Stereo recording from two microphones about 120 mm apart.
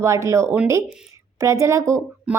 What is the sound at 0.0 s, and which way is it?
A woman's voice, 25° right (ahead or behind).